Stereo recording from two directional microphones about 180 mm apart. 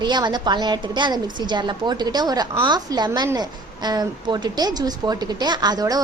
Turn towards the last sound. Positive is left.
turn(degrees=-20)  # may be behind; listen again after turning